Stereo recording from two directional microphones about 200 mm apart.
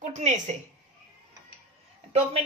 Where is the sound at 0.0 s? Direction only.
35° right (ahead or behind).